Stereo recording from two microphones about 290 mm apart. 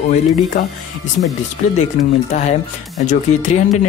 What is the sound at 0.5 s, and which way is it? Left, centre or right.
Speech, left.